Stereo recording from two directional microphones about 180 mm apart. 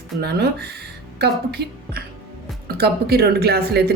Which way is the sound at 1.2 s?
65° right (ahead or behind).